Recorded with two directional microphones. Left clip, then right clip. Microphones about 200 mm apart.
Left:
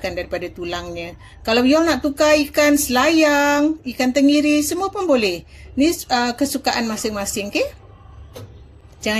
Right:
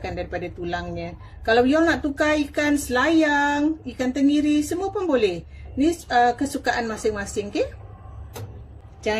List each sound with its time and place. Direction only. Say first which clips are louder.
0.0 s a woman's voice: left 5 dB; 40° left (ahead or behind)